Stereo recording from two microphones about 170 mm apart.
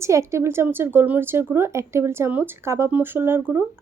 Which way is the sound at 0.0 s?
15° right (ahead or behind).